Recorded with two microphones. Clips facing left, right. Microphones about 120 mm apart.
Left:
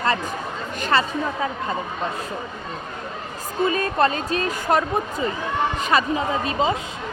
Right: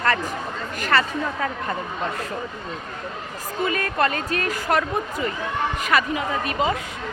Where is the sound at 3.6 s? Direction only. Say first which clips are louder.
Left 3 dB; 25° left (ahead or behind).